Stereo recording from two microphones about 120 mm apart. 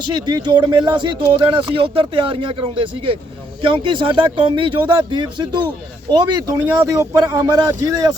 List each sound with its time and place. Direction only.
0.3 s speech: 40° right (ahead or behind)